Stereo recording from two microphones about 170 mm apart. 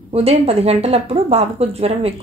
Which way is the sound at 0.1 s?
35° right (ahead or behind).